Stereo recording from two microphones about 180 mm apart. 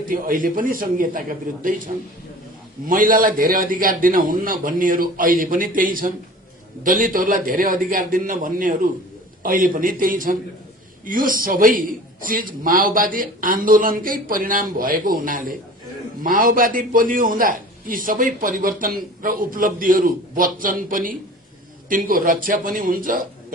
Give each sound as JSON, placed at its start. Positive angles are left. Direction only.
{"t": 0.1, "sound": "a man's voice", "side_deg": -50}
{"t": 2.8, "sound": "a man's voice", "side_deg": -50}